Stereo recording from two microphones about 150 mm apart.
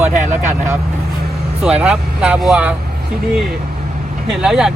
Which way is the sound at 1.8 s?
5° right (ahead or behind).